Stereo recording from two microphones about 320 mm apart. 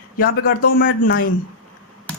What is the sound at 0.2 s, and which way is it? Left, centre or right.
A man's voice, left.